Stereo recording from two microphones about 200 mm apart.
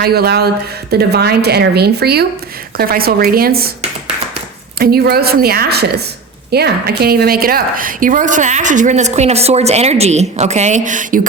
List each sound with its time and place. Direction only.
0.0 s a woman's voice: 50° right (ahead or behind)
4.8 s a woman's voice: 50° right (ahead or behind)